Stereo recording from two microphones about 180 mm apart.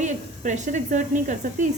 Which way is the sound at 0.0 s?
40° right (ahead or behind).